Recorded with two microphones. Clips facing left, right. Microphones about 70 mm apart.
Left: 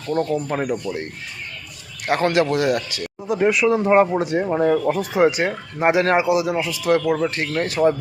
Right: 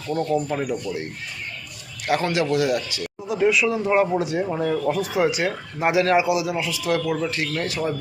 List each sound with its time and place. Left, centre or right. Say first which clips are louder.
0.1 s speech: left 2 dB; left
0.4 s speech: left 2 dB; left
2.0 s speech: left 3 dB; left
4.2 s speech: left 3 dB; left
4.4 s speech: left 4 dB; left